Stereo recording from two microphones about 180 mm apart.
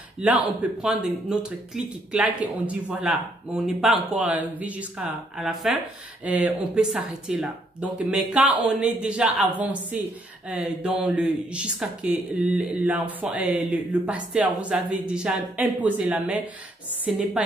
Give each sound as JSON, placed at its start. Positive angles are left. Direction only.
{"t": 0.2, "sound": "speech", "side_deg": -5}